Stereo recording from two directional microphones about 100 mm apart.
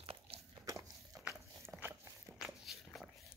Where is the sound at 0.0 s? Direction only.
80° right.